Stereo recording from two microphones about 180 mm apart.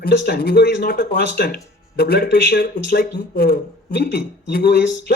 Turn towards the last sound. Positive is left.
turn(degrees=70)  # may be behind; listen again after turning